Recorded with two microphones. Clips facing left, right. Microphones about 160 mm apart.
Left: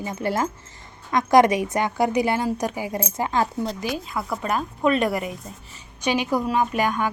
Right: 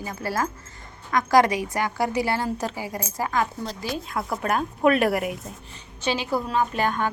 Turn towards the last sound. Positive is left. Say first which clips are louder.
# left 1 dB
turn(degrees=10)  # may be behind; listen again after turning